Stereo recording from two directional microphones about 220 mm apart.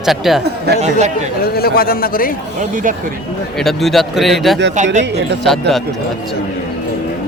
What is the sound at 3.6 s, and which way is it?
Speech, centre (ahead or behind).